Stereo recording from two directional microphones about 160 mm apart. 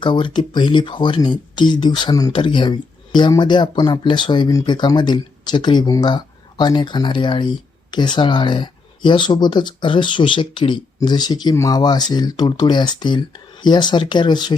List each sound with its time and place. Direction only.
0.0 s speech: 30° left (ahead or behind)